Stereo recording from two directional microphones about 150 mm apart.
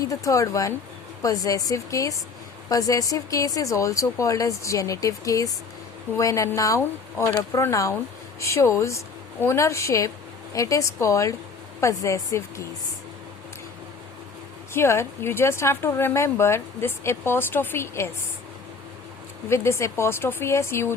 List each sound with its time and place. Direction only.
0.0 s speech: 20° left (ahead or behind)
14.7 s speech: 15° left (ahead or behind)
19.5 s speech: 20° left (ahead or behind)